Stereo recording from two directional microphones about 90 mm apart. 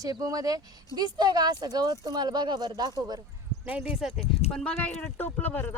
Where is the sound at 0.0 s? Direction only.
40° right (ahead or behind).